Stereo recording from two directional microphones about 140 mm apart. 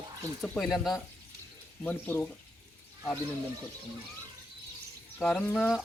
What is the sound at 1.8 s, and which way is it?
Speech, 15° left (ahead or behind).